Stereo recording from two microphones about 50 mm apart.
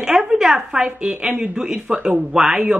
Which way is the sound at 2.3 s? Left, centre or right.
Centre.